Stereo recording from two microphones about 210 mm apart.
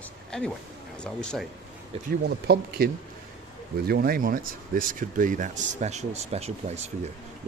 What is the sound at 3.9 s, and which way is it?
A man's voice, 45° right (ahead or behind).